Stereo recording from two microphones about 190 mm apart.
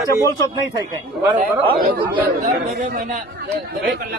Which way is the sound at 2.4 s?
40° right (ahead or behind).